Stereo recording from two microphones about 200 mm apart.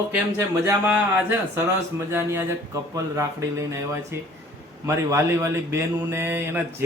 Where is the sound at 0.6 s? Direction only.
10° right (ahead or behind).